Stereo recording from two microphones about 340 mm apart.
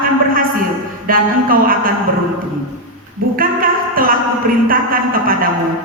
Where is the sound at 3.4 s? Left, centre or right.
Right.